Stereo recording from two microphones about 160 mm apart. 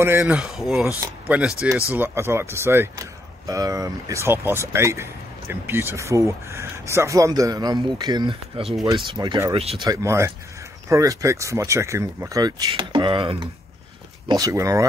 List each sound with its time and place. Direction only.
0.0 s speech: 15° right (ahead or behind)
0.4 s speech: centre (ahead or behind); by 9.8 s 35° right (ahead or behind)
9.8 s speech: 15° right (ahead or behind)